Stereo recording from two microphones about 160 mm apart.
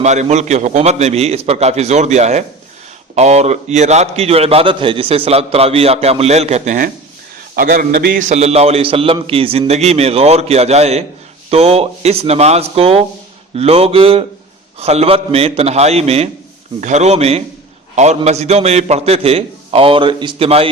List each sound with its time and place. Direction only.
0.0 s a man's voice: 45° right (ahead or behind); by 8.2 s 70° right (ahead or behind)
8.2 s a man's voice: 45° right (ahead or behind)